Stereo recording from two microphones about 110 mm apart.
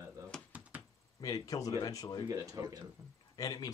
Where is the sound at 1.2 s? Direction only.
35° left (ahead or behind).